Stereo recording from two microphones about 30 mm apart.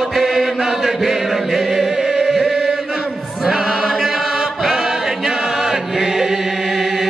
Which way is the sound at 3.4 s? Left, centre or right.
Centre.